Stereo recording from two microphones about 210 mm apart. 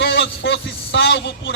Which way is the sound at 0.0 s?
60° left (ahead or behind).